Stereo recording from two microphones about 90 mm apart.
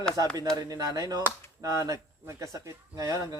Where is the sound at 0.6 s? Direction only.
45° right (ahead or behind).